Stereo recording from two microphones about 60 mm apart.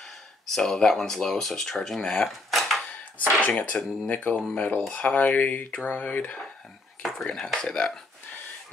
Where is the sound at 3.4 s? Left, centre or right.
Left.